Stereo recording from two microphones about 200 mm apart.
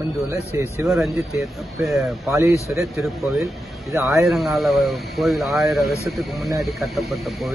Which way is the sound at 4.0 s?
15° right (ahead or behind).